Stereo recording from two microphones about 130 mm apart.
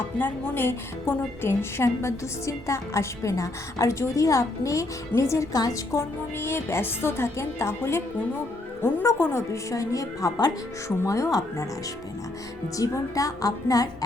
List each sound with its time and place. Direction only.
0.2 s a woman's voice: 15° left (ahead or behind)
12.7 s a woman's voice: 25° left (ahead or behind)